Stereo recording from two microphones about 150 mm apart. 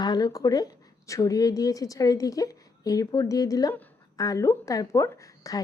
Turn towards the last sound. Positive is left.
turn(degrees=20)  # may be behind; listen again after turning